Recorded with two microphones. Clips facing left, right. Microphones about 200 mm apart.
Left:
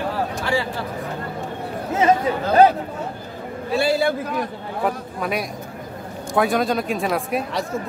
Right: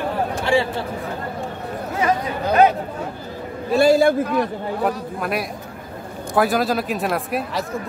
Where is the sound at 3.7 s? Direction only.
45° right (ahead or behind).